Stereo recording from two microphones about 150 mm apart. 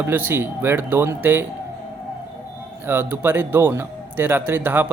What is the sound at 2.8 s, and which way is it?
A man's voice, 15° right (ahead or behind).